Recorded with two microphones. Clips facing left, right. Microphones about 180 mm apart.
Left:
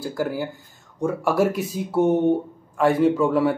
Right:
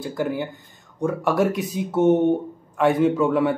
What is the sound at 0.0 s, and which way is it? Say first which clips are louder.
Speech: even; 5° left (ahead or behind).